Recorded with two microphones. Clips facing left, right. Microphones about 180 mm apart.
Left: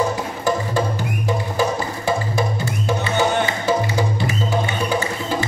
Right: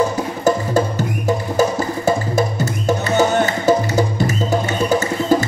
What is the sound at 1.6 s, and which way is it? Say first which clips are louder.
Music: right 6 dB; 45° right (ahead or behind).